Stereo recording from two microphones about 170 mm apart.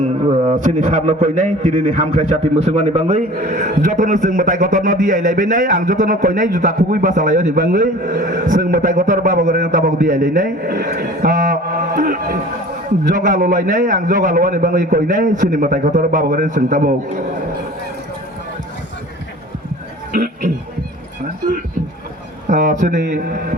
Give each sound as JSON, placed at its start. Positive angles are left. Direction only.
{"t": 0.0, "sound": "a sound", "side_deg": -30}
{"t": 0.5, "sound": "a man's voice", "side_deg": -45}
{"t": 20.1, "sound": "speech", "side_deg": -55}
{"t": 22.4, "sound": "a man's voice", "side_deg": -45}